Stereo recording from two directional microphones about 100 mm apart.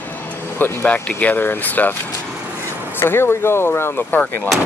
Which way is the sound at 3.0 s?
25° left (ahead or behind).